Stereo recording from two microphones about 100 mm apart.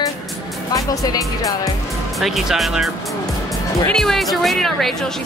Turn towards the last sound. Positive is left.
turn(degrees=0)  # may be behind; listen again after turning